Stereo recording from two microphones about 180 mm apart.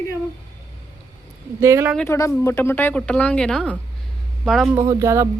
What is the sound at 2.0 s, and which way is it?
A woman's voice, 15° left (ahead or behind).